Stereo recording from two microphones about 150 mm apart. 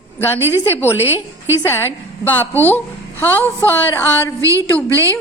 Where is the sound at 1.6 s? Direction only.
15° left (ahead or behind).